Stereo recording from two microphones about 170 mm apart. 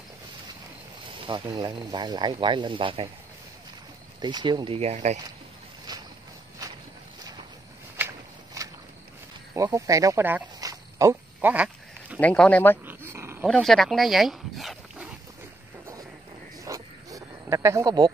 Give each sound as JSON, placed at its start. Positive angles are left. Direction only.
{"t": 1.2, "sound": "speech", "side_deg": -25}
{"t": 4.2, "sound": "speech", "side_deg": -25}
{"t": 5.9, "sound": "a sound", "side_deg": -25}
{"t": 8.0, "sound": "walk", "side_deg": -10}
{"t": 9.5, "sound": "a sound", "side_deg": -20}
{"t": 12.2, "sound": "speech", "side_deg": 10}
{"t": 12.8, "sound": "dog", "side_deg": -15}
{"t": 13.5, "sound": "speech", "side_deg": 0}
{"t": 16.6, "sound": "wild animals", "side_deg": -20}